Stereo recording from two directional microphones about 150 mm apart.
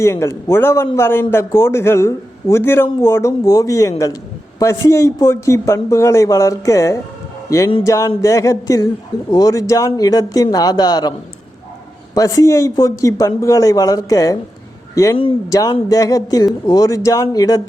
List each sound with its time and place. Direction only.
0.0 s a man's voice: 20° left (ahead or behind)
12.1 s a man's voice: 20° left (ahead or behind)